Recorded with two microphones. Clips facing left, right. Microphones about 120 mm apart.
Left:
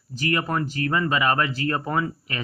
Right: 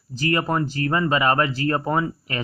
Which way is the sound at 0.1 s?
35° right (ahead or behind).